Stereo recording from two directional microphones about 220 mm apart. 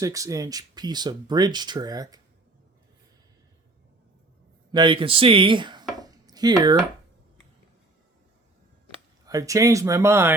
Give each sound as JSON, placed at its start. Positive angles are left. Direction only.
{"t": 0.0, "sound": "speech", "side_deg": -15}
{"t": 4.7, "sound": "speech", "side_deg": -20}
{"t": 9.2, "sound": "speech", "side_deg": -15}